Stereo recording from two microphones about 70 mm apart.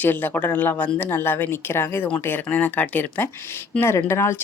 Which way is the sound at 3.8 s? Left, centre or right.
Left.